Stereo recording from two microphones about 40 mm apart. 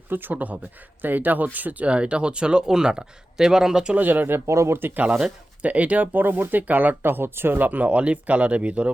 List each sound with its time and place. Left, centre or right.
0.1 s speech: right
1.9 s speech: right
3.9 s speech: right
4.4 s speech: right
5.6 s speech: right
7.0 s speech: right
7.9 s speech: right